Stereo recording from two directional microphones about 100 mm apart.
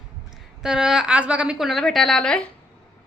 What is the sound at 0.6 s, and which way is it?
A woman's voice, 5° right (ahead or behind).